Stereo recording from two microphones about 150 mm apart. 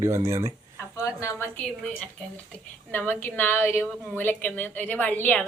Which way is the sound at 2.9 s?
15° left (ahead or behind).